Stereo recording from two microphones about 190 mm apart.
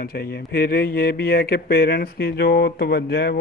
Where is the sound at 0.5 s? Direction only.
55° left (ahead or behind).